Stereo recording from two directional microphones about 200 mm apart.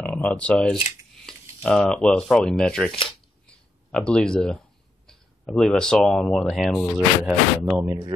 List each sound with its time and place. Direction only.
0.0 s speech: 5° left (ahead or behind)
7.8 s speech: 15° right (ahead or behind)